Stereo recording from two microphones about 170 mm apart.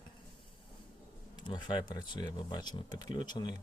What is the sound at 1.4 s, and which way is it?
Speech, 25° left (ahead or behind).